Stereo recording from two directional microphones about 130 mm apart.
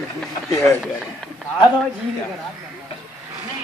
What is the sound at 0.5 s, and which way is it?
Speech, 25° left (ahead or behind).